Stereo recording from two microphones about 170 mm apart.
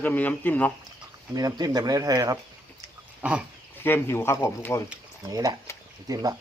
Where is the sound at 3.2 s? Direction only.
5° right (ahead or behind).